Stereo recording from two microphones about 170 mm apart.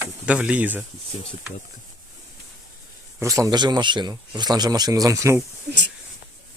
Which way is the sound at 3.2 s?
20° right (ahead or behind).